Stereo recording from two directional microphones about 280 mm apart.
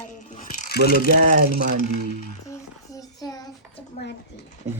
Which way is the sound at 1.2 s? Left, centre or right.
Right.